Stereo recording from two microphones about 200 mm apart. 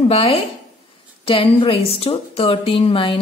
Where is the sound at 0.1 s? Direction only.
30° left (ahead or behind).